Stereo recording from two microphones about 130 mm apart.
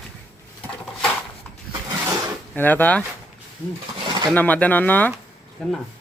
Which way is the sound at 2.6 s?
15° left (ahead or behind).